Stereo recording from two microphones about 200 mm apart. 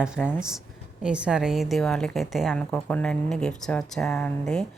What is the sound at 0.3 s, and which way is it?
A woman's voice, 5° right (ahead or behind).